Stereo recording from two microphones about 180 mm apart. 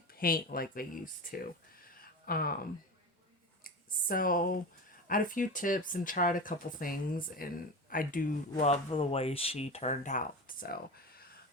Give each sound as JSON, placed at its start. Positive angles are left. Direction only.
{"t": 0.1, "sound": "speech", "side_deg": 55}
{"t": 4.1, "sound": "speech", "side_deg": 50}